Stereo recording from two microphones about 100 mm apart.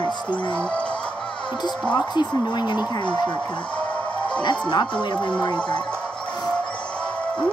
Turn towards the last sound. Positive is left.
turn(degrees=50)  # may be behind; listen again after turning